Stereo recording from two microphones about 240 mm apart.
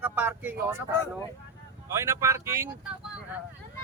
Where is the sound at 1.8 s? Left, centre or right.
Centre.